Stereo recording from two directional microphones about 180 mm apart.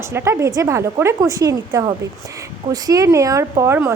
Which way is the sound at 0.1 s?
15° right (ahead or behind).